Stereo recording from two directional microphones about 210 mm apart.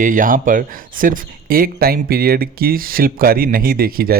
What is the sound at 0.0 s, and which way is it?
Speech, 40° right (ahead or behind).